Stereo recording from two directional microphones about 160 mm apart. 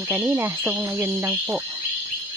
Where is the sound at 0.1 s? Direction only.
20° right (ahead or behind).